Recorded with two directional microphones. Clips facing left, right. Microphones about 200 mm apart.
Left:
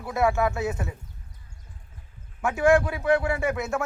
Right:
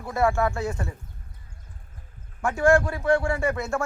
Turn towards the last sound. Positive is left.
turn(degrees=5)  # may be behind; listen again after turning